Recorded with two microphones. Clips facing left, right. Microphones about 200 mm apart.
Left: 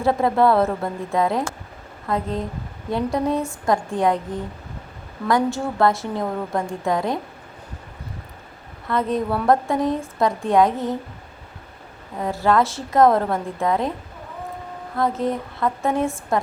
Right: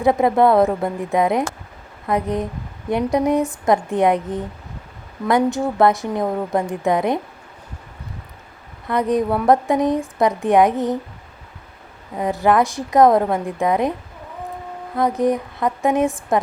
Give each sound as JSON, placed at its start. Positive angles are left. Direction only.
{"t": 0.0, "sound": "a woman's voice", "side_deg": -15}
{"t": 8.9, "sound": "a woman's voice", "side_deg": -15}
{"t": 12.1, "sound": "a woman's voice", "side_deg": -20}
{"t": 14.9, "sound": "a woman's voice", "side_deg": -15}